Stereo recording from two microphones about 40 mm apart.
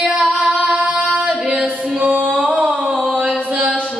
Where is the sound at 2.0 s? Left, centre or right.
Right.